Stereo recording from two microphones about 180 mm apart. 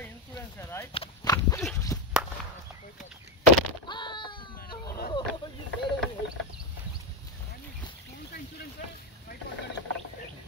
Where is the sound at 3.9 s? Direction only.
25° left (ahead or behind).